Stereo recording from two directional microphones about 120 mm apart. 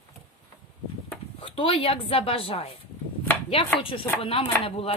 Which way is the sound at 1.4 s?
45° left (ahead or behind).